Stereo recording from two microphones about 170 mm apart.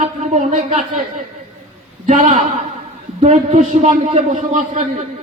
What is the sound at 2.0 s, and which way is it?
A man's voice, 50° right (ahead or behind).